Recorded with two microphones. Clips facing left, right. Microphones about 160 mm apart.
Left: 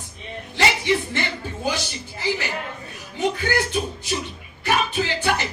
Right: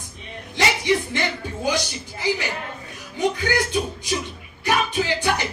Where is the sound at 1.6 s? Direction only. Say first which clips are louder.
Right 3 dB; 15° right (ahead or behind).